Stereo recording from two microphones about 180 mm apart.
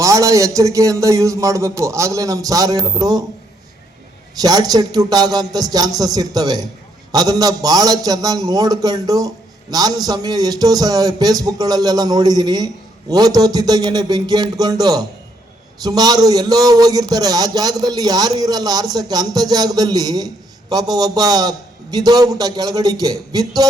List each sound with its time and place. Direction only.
0.0 s speech: 15° right (ahead or behind)
4.4 s a man's voice: 20° right (ahead or behind)